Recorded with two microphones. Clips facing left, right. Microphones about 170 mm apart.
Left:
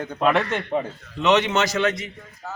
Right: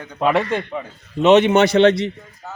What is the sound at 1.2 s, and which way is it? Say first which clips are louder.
Speech: right 7 dB; 25° right (ahead or behind).